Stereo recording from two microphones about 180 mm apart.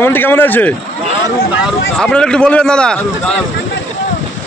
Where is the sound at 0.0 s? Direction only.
10° left (ahead or behind).